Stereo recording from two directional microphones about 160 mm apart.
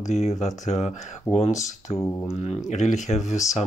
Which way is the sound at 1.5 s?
20° left (ahead or behind).